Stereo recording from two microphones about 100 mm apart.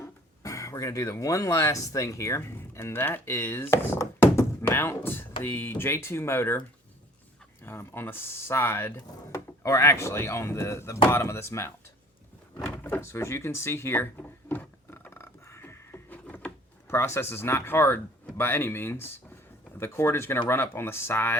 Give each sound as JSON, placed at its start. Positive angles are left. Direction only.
{"t": 0.0, "sound": "speech", "side_deg": 30}
{"t": 7.6, "sound": "speech", "side_deg": 25}
{"t": 12.8, "sound": "drawer open or close", "side_deg": 20}
{"t": 16.9, "sound": "speech", "side_deg": 25}